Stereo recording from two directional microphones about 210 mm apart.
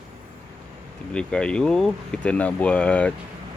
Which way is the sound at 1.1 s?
5° left (ahead or behind).